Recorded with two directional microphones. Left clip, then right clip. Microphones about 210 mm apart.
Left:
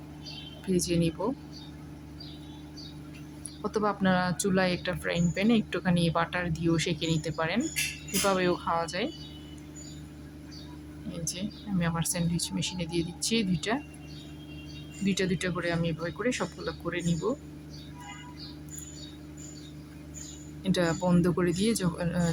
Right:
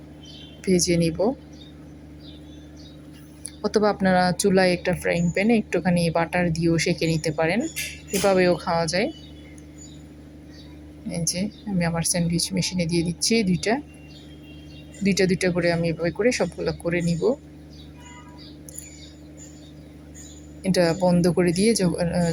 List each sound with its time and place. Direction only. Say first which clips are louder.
0.9 s speech: right 7 dB; 20° right (ahead or behind)
3.6 s speech: right 8 dB; 20° right (ahead or behind)
11.1 s speech: right 9 dB; 15° right (ahead or behind)
15.0 s speech: right 9 dB; 15° right (ahead or behind)
20.7 s speech: right 8 dB; 15° right (ahead or behind)